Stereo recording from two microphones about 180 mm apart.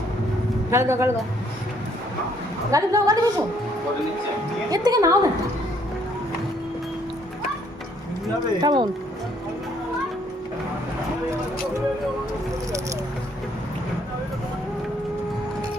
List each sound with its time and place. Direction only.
0.7 s a man's voice: 15° right (ahead or behind)
2.7 s a woman's voice: 20° right (ahead or behind)
4.7 s a woman's voice: 20° right (ahead or behind)
8.6 s a woman's voice: 25° right (ahead or behind)